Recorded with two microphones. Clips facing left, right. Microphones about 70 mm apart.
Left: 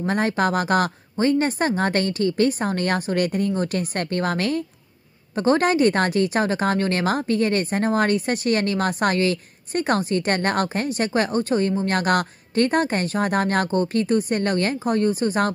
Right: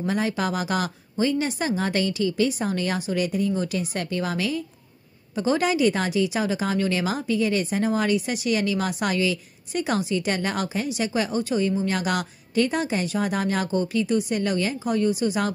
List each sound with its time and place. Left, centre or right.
0.0 s speech: left